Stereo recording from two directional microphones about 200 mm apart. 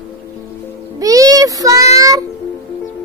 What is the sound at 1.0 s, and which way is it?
Child singing, 15° right (ahead or behind).